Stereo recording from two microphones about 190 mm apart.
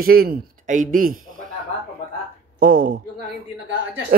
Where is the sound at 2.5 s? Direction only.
45° right (ahead or behind).